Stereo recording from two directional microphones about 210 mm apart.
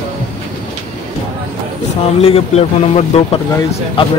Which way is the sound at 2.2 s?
30° left (ahead or behind).